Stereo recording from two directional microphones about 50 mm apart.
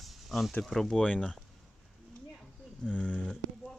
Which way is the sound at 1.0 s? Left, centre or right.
Centre.